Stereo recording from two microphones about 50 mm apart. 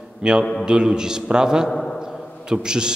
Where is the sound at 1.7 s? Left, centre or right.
Centre.